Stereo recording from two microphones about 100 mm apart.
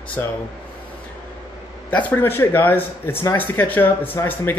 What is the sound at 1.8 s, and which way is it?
Speech, 20° left (ahead or behind).